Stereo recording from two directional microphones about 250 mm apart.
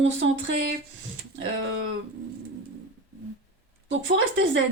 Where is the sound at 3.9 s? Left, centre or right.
Right.